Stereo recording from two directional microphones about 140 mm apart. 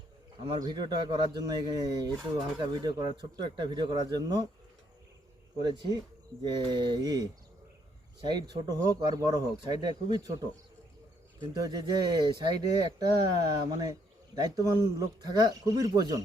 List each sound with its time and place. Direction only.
0.4 s speech: 30° right (ahead or behind)
5.6 s speech: 30° right (ahead or behind)
8.3 s speech: 30° right (ahead or behind)